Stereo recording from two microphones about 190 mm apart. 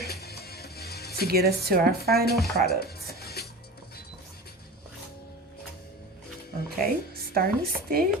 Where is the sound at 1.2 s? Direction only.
55° right (ahead or behind).